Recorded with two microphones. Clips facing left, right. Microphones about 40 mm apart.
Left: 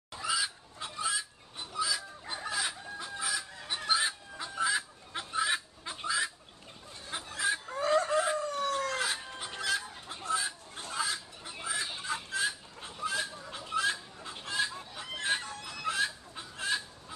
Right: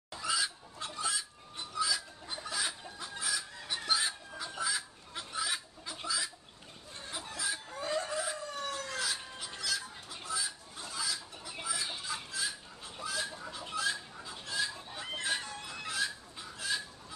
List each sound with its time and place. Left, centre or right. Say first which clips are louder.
0.1 s chicken: left 1 dB; centre
2.6 s fowl: left 2 dB; centre; by 6.3 s left
7.1 s chicken: left 6 dB; left
7.8 s chicken: left 8 dB; left
15.0 s fowl: left 3 dB; left